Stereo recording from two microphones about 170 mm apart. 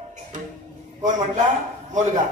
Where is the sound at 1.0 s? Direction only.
45° right (ahead or behind).